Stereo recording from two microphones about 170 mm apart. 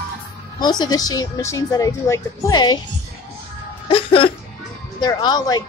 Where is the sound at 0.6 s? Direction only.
25° left (ahead or behind).